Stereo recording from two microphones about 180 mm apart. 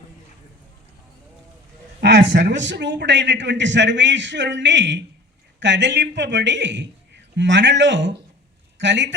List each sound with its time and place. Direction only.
2.0 s a man's voice: 70° right (ahead or behind)